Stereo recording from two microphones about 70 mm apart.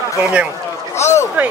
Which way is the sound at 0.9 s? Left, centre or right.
Left.